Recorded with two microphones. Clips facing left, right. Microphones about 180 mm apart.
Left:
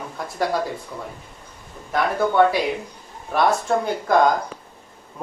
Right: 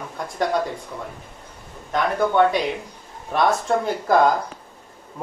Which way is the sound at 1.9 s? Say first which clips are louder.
Even; 5° left (ahead or behind).